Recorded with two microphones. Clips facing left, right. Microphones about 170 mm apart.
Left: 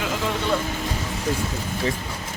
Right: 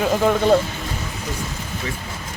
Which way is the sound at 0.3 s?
50° right (ahead or behind).